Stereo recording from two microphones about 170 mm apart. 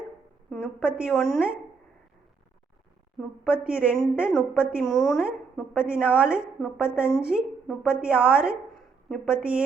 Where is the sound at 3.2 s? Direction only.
5° right (ahead or behind).